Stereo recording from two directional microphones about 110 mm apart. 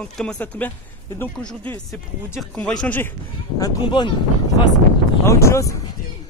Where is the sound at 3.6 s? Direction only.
40° left (ahead or behind).